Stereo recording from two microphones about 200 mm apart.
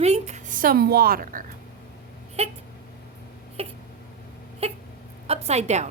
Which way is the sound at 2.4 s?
30° right (ahead or behind).